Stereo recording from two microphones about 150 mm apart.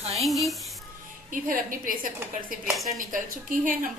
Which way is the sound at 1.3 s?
65° right (ahead or behind).